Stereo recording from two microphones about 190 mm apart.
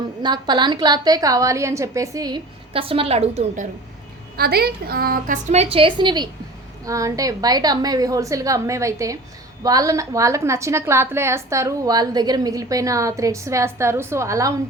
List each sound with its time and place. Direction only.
0.2 s a woman's voice: 25° right (ahead or behind)
4.4 s a woman's voice: 55° right (ahead or behind); by 14.5 s 15° right (ahead or behind)